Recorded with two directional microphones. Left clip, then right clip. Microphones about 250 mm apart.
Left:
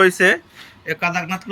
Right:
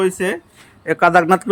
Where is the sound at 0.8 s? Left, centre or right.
Centre.